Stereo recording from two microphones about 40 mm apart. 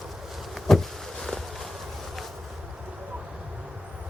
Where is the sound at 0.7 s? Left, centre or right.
Centre.